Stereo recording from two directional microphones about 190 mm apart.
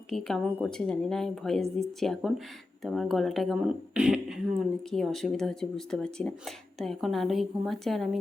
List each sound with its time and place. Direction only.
0.1 s speech: centre (ahead or behind)